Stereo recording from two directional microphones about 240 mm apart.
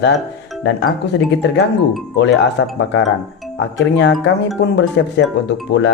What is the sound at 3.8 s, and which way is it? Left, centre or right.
A man's voice, left.